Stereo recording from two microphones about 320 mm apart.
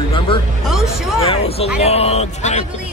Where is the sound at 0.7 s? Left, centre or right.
Centre.